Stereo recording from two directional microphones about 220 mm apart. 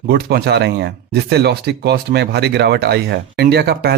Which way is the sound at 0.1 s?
45° right (ahead or behind).